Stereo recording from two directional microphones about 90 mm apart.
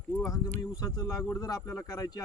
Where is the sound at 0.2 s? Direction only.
35° left (ahead or behind).